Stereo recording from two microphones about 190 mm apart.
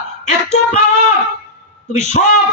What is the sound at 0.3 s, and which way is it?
Female singing, 35° left (ahead or behind).